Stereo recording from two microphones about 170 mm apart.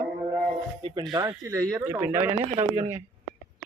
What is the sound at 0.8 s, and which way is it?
Speech, 30° right (ahead or behind).